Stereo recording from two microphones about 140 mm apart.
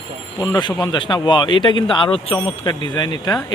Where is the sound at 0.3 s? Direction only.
25° left (ahead or behind).